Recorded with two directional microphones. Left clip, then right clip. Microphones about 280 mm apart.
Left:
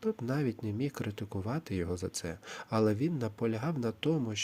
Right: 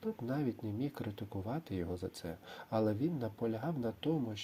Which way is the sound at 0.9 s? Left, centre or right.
Left.